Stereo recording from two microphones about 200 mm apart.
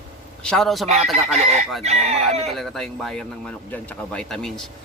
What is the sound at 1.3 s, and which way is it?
Speech, 35° right (ahead or behind).